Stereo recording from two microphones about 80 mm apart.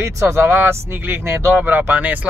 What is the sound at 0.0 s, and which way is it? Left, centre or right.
Speech, right.